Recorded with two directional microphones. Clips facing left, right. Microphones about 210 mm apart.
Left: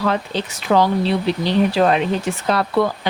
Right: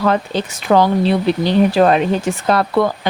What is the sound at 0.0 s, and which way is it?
Speech, 50° right (ahead or behind).